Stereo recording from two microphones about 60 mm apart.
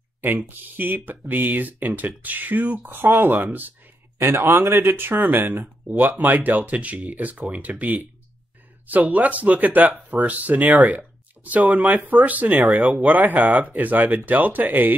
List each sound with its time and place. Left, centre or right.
0.2 s speech: right
4.2 s speech: right